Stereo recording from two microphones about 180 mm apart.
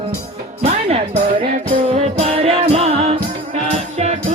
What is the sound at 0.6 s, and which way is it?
Music, 35° right (ahead or behind).